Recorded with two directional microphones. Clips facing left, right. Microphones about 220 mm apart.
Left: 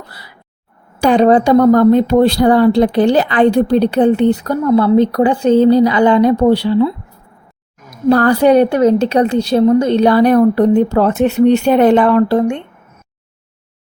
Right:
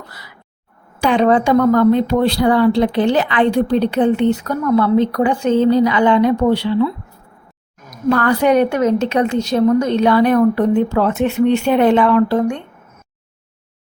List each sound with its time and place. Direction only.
1.0 s a woman's voice: 40° left (ahead or behind)